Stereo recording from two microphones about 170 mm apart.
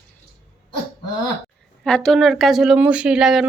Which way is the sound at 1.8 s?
5° left (ahead or behind).